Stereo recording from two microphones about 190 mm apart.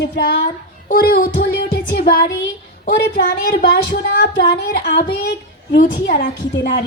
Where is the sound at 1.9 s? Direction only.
55° left (ahead or behind).